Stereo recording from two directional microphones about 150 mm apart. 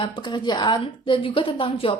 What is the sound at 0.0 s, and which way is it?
A woman's voice, 30° left (ahead or behind).